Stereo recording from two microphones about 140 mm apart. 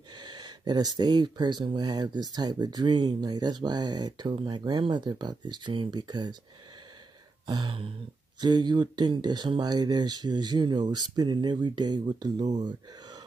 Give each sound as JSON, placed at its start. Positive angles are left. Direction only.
{"t": 0.1, "sound": "speech", "side_deg": -30}
{"t": 7.4, "sound": "a sound", "side_deg": -30}
{"t": 8.4, "sound": "speech", "side_deg": -30}